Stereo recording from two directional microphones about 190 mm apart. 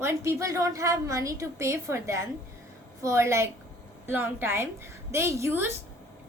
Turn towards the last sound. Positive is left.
turn(degrees=-10)  # may be behind; listen again after turning